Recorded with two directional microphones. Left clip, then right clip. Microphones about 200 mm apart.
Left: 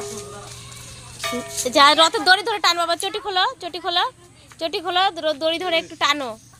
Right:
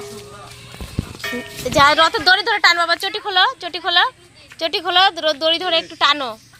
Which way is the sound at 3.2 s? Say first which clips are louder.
Right 5 dB; 5° left (ahead or behind).